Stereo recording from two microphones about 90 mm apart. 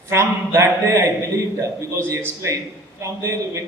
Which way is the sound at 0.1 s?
35° right (ahead or behind).